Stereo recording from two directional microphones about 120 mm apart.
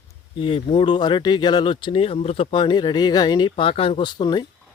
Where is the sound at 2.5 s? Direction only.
40° left (ahead or behind).